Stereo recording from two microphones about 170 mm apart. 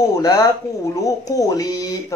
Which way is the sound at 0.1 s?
20° left (ahead or behind).